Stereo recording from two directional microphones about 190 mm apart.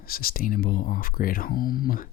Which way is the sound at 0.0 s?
50° left (ahead or behind).